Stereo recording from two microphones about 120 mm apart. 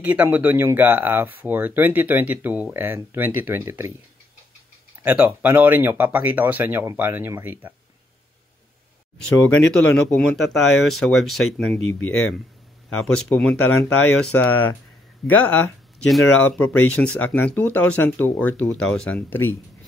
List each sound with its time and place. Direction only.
0.0 s speech: 10° right (ahead or behind)
5.0 s speech: 15° right (ahead or behind)
9.5 s speech: 5° left (ahead or behind)
13.0 s speech: 5° left (ahead or behind)